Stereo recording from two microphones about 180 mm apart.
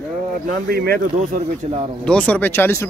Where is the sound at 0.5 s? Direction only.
55° right (ahead or behind).